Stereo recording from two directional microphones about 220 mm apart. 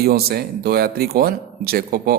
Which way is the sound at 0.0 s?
45° right (ahead or behind).